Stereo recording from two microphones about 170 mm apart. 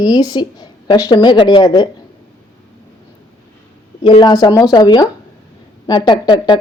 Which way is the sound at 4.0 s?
30° left (ahead or behind).